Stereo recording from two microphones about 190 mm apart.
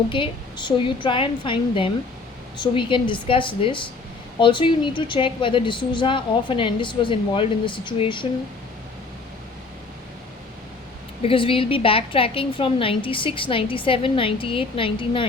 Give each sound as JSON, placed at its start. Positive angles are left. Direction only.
{"t": 0.1, "sound": "a woman's voice", "side_deg": 25}
{"t": 11.2, "sound": "a woman's voice", "side_deg": 30}